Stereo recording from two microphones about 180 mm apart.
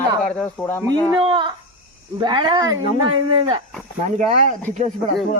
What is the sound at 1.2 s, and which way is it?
Speech, 30° right (ahead or behind).